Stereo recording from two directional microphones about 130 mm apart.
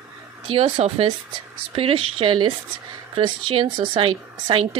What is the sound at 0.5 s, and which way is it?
A woman's voice, 50° right (ahead or behind).